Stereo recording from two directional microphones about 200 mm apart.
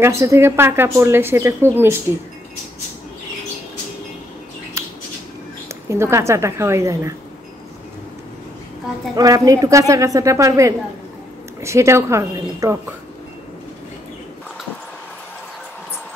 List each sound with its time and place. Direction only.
0.0 s a woman's voice: 15° right (ahead or behind)
5.7 s a woman's voice: 15° right (ahead or behind)
9.1 s a woman's voice: 20° right (ahead or behind)